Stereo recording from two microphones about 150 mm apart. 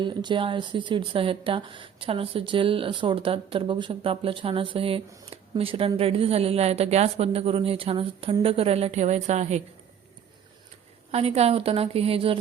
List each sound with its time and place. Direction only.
0.0 s speech: 30° right (ahead or behind); by 9.6 s 50° right (ahead or behind)
11.1 s speech: 45° right (ahead or behind)